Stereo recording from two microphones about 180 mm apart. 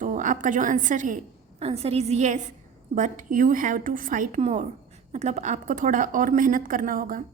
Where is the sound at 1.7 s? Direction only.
35° right (ahead or behind).